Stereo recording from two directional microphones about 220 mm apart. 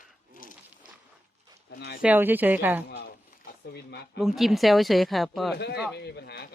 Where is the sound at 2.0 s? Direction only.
10° right (ahead or behind).